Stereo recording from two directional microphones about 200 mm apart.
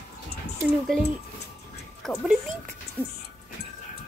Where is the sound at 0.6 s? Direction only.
5° right (ahead or behind).